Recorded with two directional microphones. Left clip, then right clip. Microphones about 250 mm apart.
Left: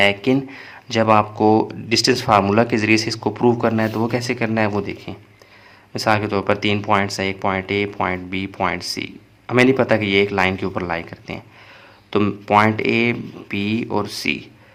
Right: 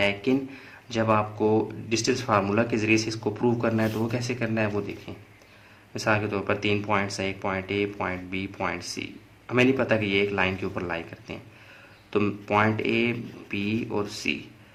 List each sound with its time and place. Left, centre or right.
0.0 s speech: left